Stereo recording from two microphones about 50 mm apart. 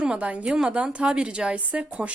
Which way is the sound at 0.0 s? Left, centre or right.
Right.